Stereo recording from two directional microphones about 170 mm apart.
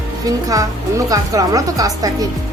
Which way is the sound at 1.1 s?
20° right (ahead or behind).